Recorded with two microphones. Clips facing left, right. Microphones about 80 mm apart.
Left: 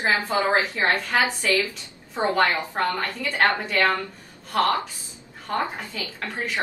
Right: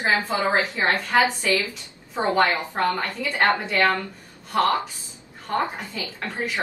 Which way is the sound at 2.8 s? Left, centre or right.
Centre.